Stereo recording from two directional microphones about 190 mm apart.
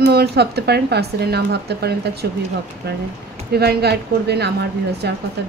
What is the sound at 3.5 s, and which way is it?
Speech, 55° right (ahead or behind).